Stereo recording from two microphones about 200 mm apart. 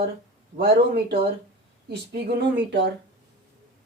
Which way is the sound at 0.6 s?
55° right (ahead or behind).